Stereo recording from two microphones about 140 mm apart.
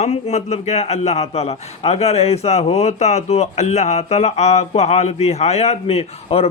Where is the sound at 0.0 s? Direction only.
50° left (ahead or behind).